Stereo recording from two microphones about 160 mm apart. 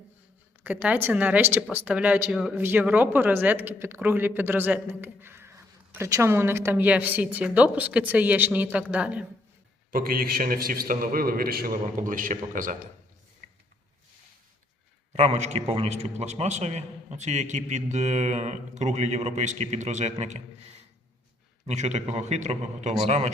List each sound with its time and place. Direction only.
0.6 s speech: 10° right (ahead or behind)
9.9 s a man's voice: 65° right (ahead or behind)
15.1 s a man's voice: 45° right (ahead or behind)
21.7 s a man's voice: 45° right (ahead or behind)